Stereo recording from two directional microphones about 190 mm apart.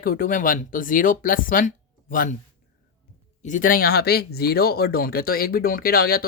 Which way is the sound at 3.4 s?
45° left (ahead or behind).